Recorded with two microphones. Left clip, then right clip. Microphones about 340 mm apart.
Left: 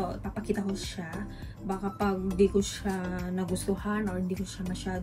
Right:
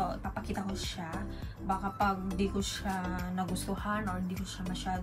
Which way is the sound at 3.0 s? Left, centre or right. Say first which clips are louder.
Left 1 dB; centre.